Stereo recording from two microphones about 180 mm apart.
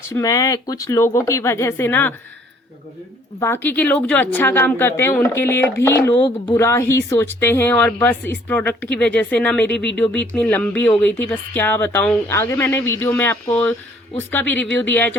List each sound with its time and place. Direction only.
0.1 s a woman's voice: 20° left (ahead or behind)
3.4 s a woman's voice: 10° left (ahead or behind)
6.1 s speech: 25° left (ahead or behind)
6.6 s a woman's voice: 15° left (ahead or behind)